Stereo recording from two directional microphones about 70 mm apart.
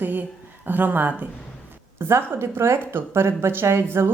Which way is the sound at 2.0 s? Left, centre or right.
Right.